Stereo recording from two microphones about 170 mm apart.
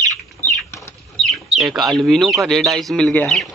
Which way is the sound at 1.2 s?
Centre (ahead or behind).